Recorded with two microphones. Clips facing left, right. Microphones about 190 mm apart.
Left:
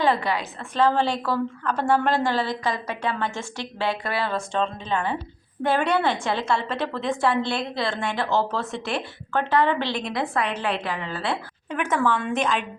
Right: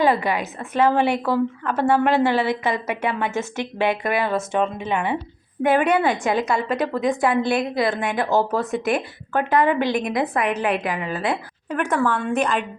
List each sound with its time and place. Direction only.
0.0 s a woman's voice: 15° right (ahead or behind)
1.0 s a woman's voice: 20° right (ahead or behind)
1.6 s a woman's voice: 5° right (ahead or behind)
2.6 s a woman's voice: 20° right (ahead or behind)
3.1 s a woman's voice: 10° right (ahead or behind)
11.7 s a woman's voice: 5° left (ahead or behind)